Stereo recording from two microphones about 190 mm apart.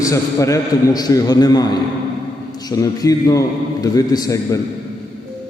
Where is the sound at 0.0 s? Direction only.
15° left (ahead or behind).